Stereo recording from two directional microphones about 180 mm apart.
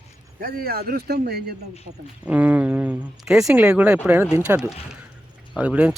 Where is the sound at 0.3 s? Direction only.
55° right (ahead or behind).